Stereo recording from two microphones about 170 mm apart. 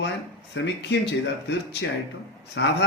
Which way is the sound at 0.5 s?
90° left.